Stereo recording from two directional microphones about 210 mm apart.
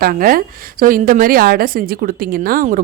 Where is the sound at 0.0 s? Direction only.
45° right (ahead or behind).